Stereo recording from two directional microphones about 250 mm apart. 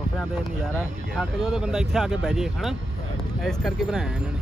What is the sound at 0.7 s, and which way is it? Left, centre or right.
Speech, centre.